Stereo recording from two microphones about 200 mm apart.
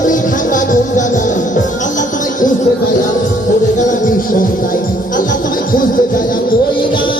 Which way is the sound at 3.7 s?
40° left (ahead or behind).